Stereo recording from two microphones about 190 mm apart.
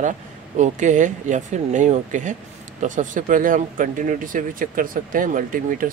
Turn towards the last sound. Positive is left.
turn(degrees=-45)  # may be behind; listen again after turning